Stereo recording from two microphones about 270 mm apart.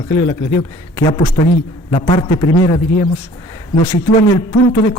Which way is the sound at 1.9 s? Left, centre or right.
Centre.